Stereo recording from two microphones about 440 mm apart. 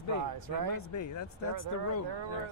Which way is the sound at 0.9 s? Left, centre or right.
Left.